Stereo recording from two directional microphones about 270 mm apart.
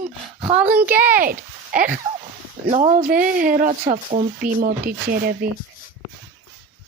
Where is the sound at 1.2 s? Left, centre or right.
Right.